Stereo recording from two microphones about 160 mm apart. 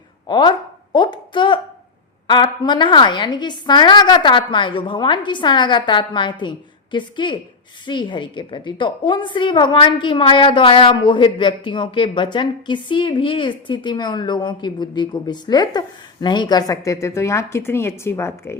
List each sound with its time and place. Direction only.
0.3 s a woman's voice: 30° left (ahead or behind)
0.9 s a sound: 30° left (ahead or behind)
2.2 s a woman's voice: 30° left (ahead or behind)